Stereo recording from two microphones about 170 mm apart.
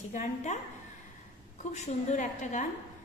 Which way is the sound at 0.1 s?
45° left (ahead or behind).